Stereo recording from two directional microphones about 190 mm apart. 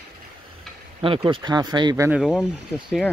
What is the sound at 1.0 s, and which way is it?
Speech, 25° right (ahead or behind).